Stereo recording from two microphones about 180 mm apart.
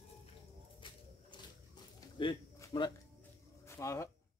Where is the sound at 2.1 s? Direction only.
25° left (ahead or behind).